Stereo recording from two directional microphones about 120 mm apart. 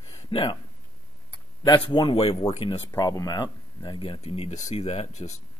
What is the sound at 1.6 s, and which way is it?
Speech, 40° left (ahead or behind).